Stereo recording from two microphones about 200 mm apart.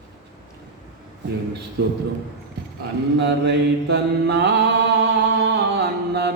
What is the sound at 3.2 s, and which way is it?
Mantra, 60° right (ahead or behind).